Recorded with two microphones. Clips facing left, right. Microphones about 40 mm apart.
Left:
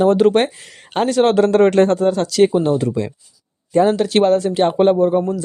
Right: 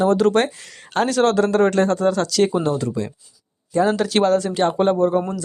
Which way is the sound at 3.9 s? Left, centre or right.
Centre.